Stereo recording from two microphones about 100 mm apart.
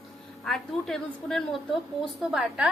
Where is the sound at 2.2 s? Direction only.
5° right (ahead or behind).